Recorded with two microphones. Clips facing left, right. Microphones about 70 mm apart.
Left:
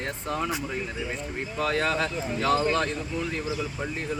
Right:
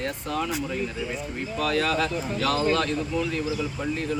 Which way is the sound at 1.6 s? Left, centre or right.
Left.